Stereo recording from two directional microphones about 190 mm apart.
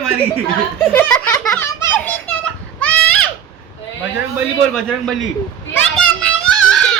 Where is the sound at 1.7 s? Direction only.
10° left (ahead or behind).